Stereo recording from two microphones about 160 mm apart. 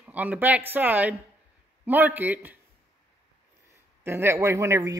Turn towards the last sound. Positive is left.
turn(degrees=-20)  # may be behind; listen again after turning